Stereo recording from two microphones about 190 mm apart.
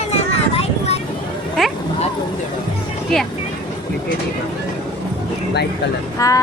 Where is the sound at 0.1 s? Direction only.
35° left (ahead or behind).